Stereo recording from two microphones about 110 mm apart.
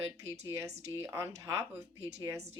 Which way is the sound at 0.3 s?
25° right (ahead or behind).